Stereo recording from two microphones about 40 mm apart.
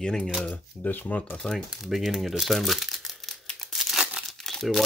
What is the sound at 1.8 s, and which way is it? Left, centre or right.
Speech, centre.